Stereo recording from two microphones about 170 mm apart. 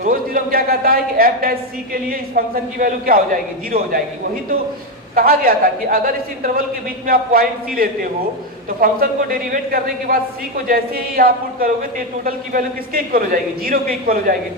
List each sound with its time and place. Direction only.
0.0 s a woman's voice: 55° right (ahead or behind)
5.1 s a woman's voice: 60° right (ahead or behind)